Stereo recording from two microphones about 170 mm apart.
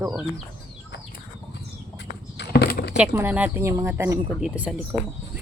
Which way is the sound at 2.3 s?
80° left.